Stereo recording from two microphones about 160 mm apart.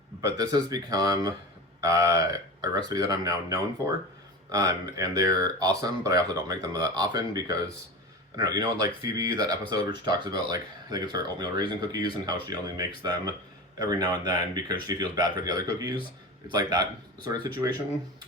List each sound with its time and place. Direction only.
0.2 s speech: 20° right (ahead or behind)